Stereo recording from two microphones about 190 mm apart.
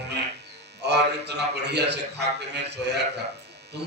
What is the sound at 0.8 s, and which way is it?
A man's voice, 60° right (ahead or behind).